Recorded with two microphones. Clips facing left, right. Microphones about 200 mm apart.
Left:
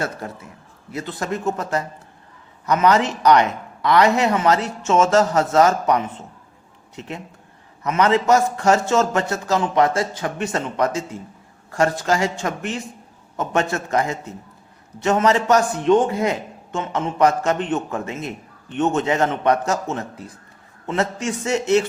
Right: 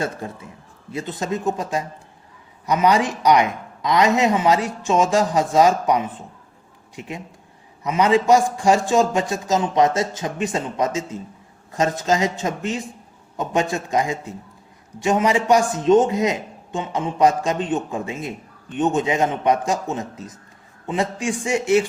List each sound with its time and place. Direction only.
1.2 s a man's voice: 15° right (ahead or behind)